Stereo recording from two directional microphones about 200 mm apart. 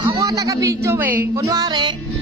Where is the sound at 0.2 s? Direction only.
15° right (ahead or behind).